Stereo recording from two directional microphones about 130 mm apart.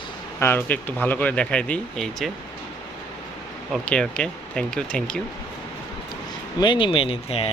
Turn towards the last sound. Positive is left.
turn(degrees=45)  # may be behind; listen again after turning